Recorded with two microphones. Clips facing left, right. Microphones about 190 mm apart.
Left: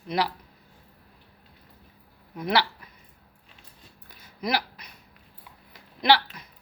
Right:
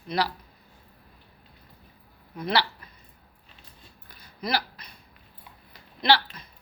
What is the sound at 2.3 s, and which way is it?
Speech, 15° left (ahead or behind).